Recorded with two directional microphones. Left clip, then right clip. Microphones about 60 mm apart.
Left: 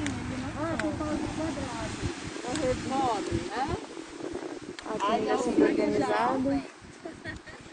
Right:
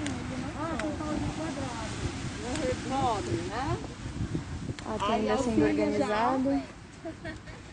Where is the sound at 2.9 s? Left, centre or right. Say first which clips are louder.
Right 1 dB; left.